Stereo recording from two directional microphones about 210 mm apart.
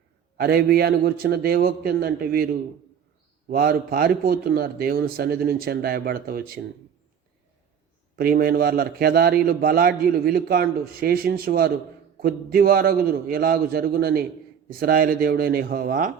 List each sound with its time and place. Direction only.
0.3 s a man's voice: 45° right (ahead or behind)
8.2 s a man's voice: 45° right (ahead or behind)